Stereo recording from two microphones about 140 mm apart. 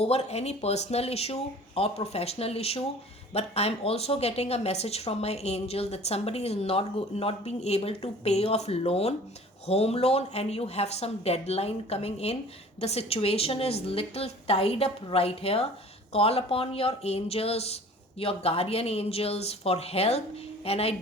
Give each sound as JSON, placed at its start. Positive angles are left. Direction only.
{"t": 0.0, "sound": "a woman's voice", "side_deg": 50}